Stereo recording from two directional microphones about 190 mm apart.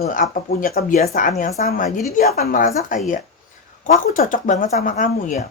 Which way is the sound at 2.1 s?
55° left (ahead or behind).